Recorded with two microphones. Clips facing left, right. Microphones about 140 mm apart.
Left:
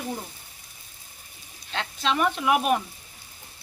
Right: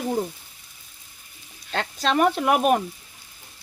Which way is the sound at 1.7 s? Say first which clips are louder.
Right 3 dB; 45° right (ahead or behind).